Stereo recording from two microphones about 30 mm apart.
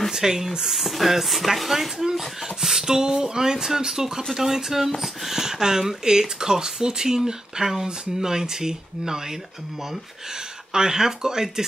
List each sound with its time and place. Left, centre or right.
0.1 s speech: centre
0.7 s speech: centre
5.4 s speech: centre
10.7 s speech: centre